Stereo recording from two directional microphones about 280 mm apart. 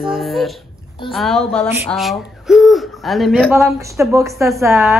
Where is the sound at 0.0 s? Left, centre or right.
Centre.